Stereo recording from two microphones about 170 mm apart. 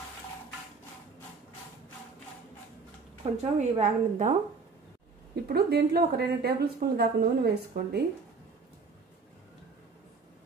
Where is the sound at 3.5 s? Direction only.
45° right (ahead or behind).